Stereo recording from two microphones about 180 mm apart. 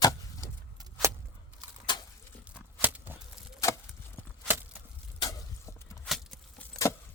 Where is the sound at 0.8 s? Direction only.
15° right (ahead or behind).